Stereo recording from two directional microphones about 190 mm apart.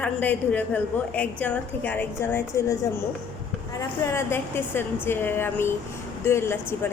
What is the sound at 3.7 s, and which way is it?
A woman's voice, 15° left (ahead or behind).